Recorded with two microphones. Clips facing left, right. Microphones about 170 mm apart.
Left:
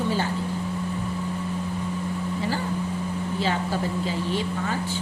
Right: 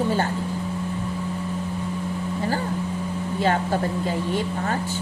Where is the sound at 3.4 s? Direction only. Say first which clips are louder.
Right 5 dB; 55° right (ahead or behind).